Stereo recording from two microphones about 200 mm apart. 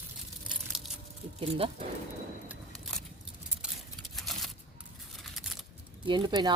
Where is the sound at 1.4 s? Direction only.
30° right (ahead or behind).